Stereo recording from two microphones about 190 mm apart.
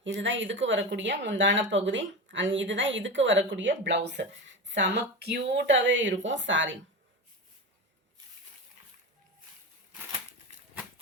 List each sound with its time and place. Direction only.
0.0 s speech: 75° right (ahead or behind)